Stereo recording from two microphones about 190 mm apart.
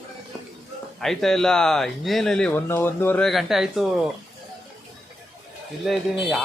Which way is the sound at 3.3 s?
Centre (ahead or behind).